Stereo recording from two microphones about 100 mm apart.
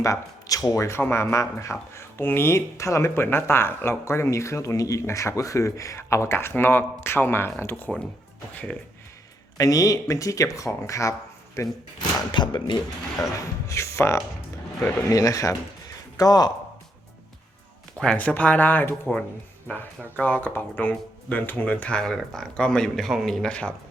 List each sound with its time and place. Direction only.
0.0 s speech: 35° left (ahead or behind)
9.6 s speech: 35° left (ahead or behind)
12.3 s speech: 50° left (ahead or behind)
13.2 s speech: 30° left (ahead or behind)
17.9 s speech: 10° left (ahead or behind)
20.1 s speech: 10° left (ahead or behind)